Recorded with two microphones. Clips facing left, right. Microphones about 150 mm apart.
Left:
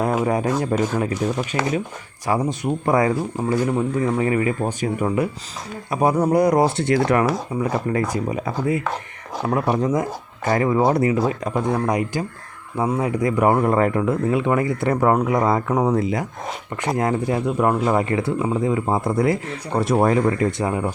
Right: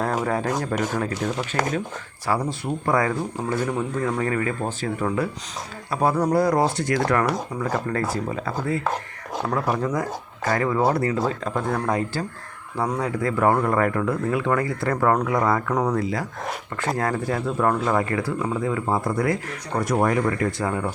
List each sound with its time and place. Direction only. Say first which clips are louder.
0.0 s speech: left 4 dB; 10° left (ahead or behind)
3.7 s speech: left 4 dB; 10° left (ahead or behind)